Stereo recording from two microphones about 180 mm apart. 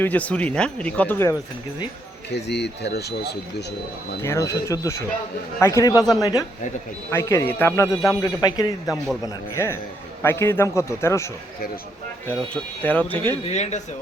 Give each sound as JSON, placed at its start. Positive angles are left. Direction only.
{"t": 0.0, "sound": "speech", "side_deg": 10}
{"t": 2.3, "sound": "speech", "side_deg": 70}
{"t": 4.2, "sound": "a man's voice", "side_deg": 15}
{"t": 12.8, "sound": "speech", "side_deg": 10}
{"t": 13.4, "sound": "speech", "side_deg": 40}